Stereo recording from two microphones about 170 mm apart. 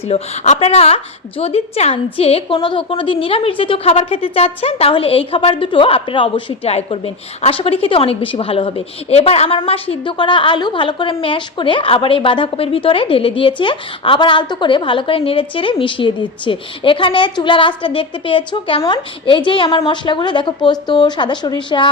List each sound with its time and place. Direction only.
0.1 s a woman's voice: 40° left (ahead or behind)